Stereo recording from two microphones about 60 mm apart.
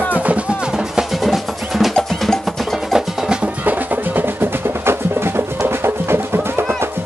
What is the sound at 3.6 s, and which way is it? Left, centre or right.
Music, right.